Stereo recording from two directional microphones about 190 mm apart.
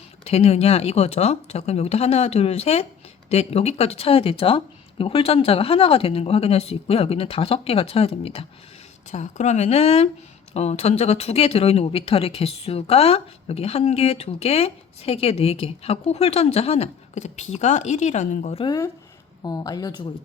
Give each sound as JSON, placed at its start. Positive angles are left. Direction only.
{"t": 0.3, "sound": "speech", "side_deg": 35}
{"t": 18.6, "sound": "speech", "side_deg": 20}